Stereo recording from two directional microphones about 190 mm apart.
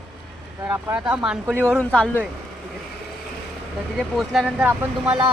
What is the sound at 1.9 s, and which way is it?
Speech, 5° left (ahead or behind).